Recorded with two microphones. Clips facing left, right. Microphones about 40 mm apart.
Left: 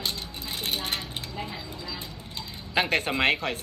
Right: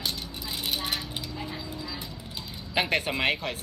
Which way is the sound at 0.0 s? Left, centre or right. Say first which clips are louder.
Left 1 dB; left.